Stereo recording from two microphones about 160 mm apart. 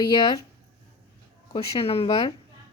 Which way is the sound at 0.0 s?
25° left (ahead or behind).